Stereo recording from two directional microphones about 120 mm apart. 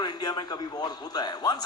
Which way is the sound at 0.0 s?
35° left (ahead or behind).